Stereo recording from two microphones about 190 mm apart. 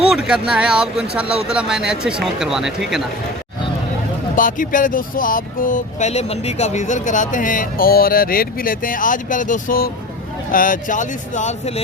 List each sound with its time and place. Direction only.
0.1 s speech: 5° right (ahead or behind)
4.4 s speech: 45° left (ahead or behind)